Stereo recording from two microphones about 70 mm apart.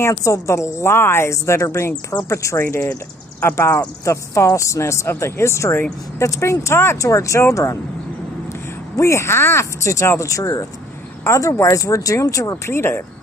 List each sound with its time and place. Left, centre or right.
0.0 s a woman's voice: left
8.9 s a woman's voice: left
12.7 s speech: left